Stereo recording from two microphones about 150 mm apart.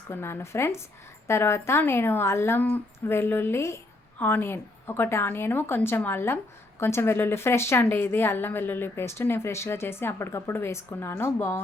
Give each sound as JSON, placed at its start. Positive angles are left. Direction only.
{"t": 0.1, "sound": "a woman's voice", "side_deg": 15}